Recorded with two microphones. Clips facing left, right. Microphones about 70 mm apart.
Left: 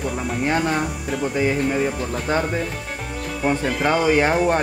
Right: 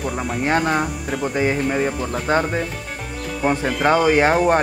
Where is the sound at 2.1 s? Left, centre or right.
Right.